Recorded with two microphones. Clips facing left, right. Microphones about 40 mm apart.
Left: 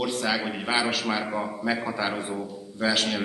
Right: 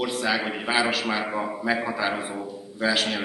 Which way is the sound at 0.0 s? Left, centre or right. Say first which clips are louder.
Right 1 dB; centre.